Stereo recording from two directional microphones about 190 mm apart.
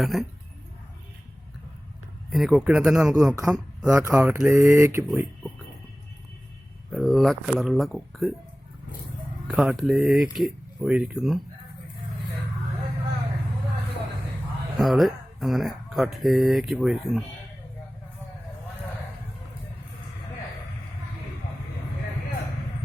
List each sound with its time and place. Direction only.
0.0 s speech: centre (ahead or behind)
2.3 s speech: centre (ahead or behind)
4.0 s a sound: 15° right (ahead or behind)
5.0 s speech: 5° right (ahead or behind)
6.9 s speech: centre (ahead or behind)
9.5 s speech: 5° right (ahead or behind)
14.8 s speech: centre (ahead or behind)